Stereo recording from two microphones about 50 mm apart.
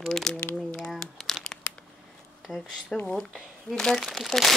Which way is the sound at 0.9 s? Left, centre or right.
Centre.